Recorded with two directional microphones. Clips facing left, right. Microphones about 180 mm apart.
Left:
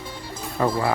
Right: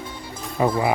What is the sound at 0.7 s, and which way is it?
Speech, 20° right (ahead or behind).